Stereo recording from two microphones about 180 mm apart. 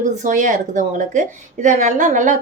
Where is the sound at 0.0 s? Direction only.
45° right (ahead or behind).